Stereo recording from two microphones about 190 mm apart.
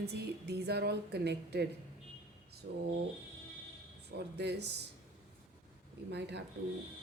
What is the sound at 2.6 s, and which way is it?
Speech, 55° right (ahead or behind).